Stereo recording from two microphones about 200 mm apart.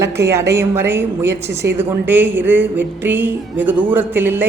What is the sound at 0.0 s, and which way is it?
A woman's voice, 15° right (ahead or behind).